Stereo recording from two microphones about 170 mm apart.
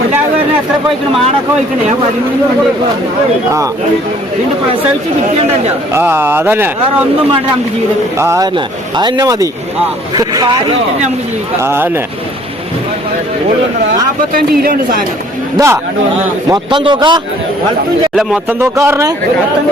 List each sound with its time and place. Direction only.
5.9 s speech: 15° right (ahead or behind)
8.2 s speech: 15° right (ahead or behind)
8.5 s speech: 25° right (ahead or behind)
14.3 s a man's voice: 60° right (ahead or behind)
15.5 s speech: 15° right (ahead or behind)
16.5 s speech: 30° right (ahead or behind)
18.2 s speech: 5° right (ahead or behind)
18.6 s speech: 15° right (ahead or behind)